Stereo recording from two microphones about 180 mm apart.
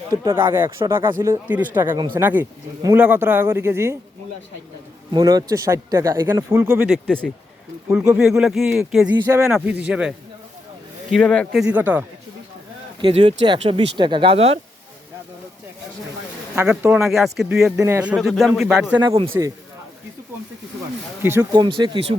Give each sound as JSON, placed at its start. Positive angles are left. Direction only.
{"t": 0.1, "sound": "speech", "side_deg": -15}
{"t": 5.1, "sound": "a man's voice", "side_deg": -20}
{"t": 9.2, "sound": "a man's voice", "side_deg": -15}
{"t": 11.6, "sound": "speech", "side_deg": -10}
{"t": 13.0, "sound": "speech", "side_deg": -30}
{"t": 16.6, "sound": "a man's voice", "side_deg": -10}
{"t": 17.8, "sound": "a man's voice", "side_deg": -10}
{"t": 19.3, "sound": "speech", "side_deg": -15}
{"t": 21.2, "sound": "speech", "side_deg": -10}
{"t": 21.5, "sound": "speech", "side_deg": -25}